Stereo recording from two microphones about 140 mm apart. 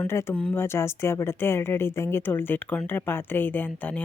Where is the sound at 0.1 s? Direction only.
20° left (ahead or behind).